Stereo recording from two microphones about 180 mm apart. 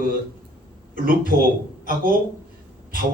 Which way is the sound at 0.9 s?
55° right (ahead or behind).